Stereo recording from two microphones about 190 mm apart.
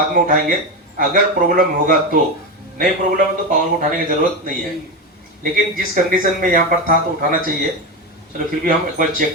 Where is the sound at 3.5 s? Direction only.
45° right (ahead or behind).